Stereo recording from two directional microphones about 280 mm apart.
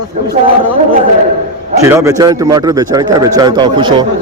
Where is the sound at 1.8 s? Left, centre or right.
Centre.